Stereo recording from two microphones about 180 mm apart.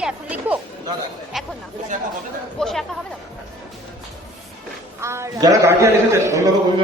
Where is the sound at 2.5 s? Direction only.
Centre (ahead or behind).